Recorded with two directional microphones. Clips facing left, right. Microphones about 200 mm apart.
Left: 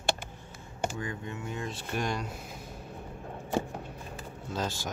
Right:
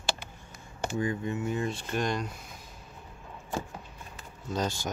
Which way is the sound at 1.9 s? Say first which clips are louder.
Right 1 dB; 10° left (ahead or behind).